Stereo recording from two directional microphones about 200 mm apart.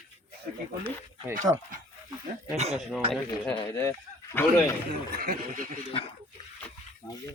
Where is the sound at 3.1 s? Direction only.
5° left (ahead or behind).